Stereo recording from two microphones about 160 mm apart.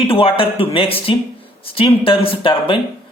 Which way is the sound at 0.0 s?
35° left (ahead or behind).